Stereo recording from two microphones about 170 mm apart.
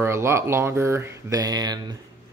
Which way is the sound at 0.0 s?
15° right (ahead or behind).